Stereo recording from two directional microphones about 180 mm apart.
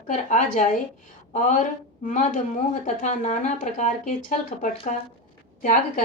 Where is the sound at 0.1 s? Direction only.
45° left (ahead or behind).